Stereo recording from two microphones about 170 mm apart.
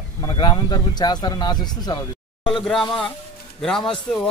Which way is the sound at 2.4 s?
5° left (ahead or behind).